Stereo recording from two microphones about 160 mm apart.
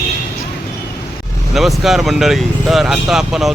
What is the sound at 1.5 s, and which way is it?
Speech, centre (ahead or behind).